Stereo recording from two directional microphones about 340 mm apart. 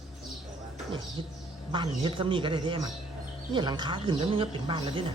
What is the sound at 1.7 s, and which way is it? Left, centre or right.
A woman's voice, centre.